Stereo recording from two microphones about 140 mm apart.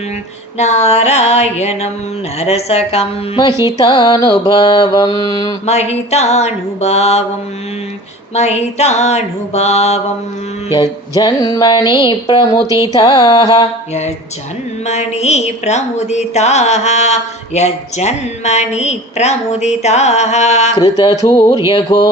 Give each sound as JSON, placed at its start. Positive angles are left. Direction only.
{"t": 0.6, "sound": "music", "side_deg": 50}
{"t": 3.3, "sound": "mantra", "side_deg": 30}
{"t": 5.6, "sound": "music", "side_deg": 50}
{"t": 8.4, "sound": "music", "side_deg": 50}
{"t": 10.7, "sound": "mantra", "side_deg": 30}
{"t": 14.8, "sound": "music", "side_deg": 50}
{"t": 20.7, "sound": "mantra", "side_deg": 35}